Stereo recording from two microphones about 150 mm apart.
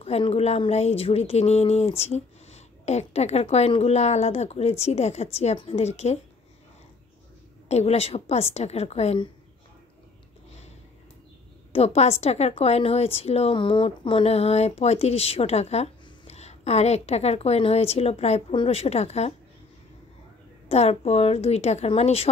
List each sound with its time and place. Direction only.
0.0 s a woman's voice: 45° left (ahead or behind)
7.6 s a woman's voice: 45° left (ahead or behind)
11.7 s a woman's voice: 45° left (ahead or behind)
20.6 s a woman's voice: 45° left (ahead or behind)